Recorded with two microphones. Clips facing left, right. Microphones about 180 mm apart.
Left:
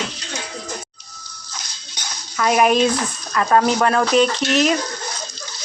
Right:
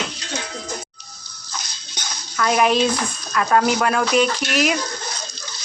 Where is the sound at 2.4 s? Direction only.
5° left (ahead or behind).